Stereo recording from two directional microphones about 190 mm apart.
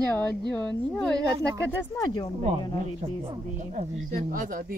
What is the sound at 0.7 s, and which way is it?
Speech, 5° left (ahead or behind).